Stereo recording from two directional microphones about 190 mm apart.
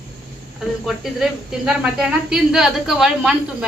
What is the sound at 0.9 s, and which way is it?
Speech, centre (ahead or behind).